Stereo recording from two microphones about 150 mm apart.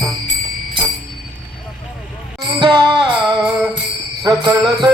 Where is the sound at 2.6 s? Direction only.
30° right (ahead or behind).